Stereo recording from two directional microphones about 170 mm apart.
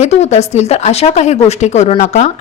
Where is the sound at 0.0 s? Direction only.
40° left (ahead or behind).